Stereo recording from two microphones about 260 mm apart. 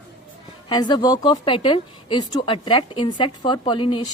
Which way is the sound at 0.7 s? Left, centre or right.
Centre.